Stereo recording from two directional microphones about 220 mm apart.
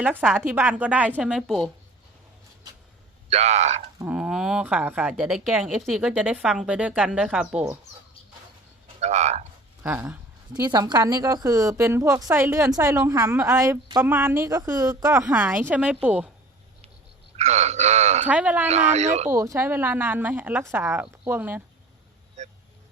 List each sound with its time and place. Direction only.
0.0 s a woman's voice: 5° right (ahead or behind)
3.2 s speech: 30° right (ahead or behind)
3.9 s speech: 5° right (ahead or behind)
9.0 s speech: 30° right (ahead or behind)
9.8 s a woman's voice: 5° right (ahead or behind)
10.5 s a woman's voice: 20° right (ahead or behind)
17.3 s speech: 30° right (ahead or behind)
18.3 s a woman's voice: 5° right (ahead or behind)
18.7 s speech: 30° right (ahead or behind)
19.3 s a woman's voice: 15° right (ahead or behind)
22.4 s vehicle: 30° right (ahead or behind)